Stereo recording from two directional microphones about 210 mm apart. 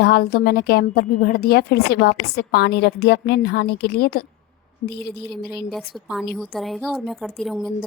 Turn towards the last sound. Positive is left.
turn(degrees=0)  # may be behind; listen again after turning